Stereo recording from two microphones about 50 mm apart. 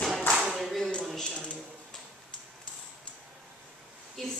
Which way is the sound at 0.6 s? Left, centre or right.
Centre.